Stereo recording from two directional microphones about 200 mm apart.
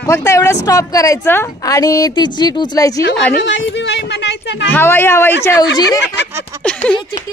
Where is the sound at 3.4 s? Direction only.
65° left (ahead or behind).